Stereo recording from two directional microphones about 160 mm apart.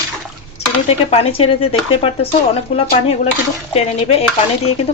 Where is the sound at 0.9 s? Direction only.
40° left (ahead or behind).